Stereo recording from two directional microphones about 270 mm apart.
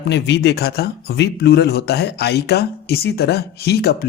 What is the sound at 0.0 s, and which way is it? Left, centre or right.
Speech, left.